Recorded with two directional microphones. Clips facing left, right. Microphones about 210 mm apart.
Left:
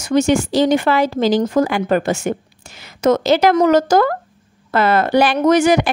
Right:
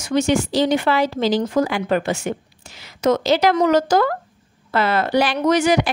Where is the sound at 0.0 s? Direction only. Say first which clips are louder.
Left 3 dB; 45° left (ahead or behind).